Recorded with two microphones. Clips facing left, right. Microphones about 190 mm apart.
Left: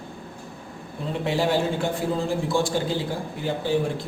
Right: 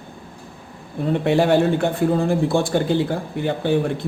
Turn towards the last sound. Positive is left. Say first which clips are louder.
# right 4 dB
turn(degrees=-60)  # may be behind; listen again after turning